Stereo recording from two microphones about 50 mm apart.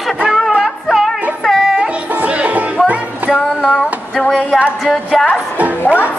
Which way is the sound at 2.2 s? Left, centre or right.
Right.